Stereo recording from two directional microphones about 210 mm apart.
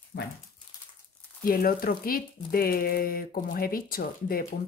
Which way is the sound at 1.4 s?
45° left (ahead or behind).